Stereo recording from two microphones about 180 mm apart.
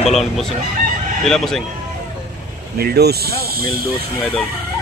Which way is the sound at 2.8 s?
60° right (ahead or behind).